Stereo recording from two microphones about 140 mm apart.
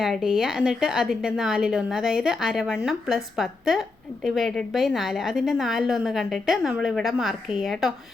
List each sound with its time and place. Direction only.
0.0 s a woman's voice: centre (ahead or behind)